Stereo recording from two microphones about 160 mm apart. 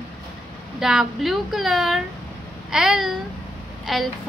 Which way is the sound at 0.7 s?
5° right (ahead or behind).